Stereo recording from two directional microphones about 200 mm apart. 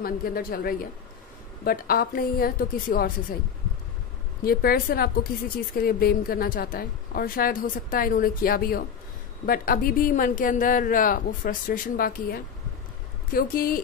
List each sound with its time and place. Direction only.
0.0 s a woman's voice: 45° left (ahead or behind)
4.5 s a woman's voice: 50° left (ahead or behind)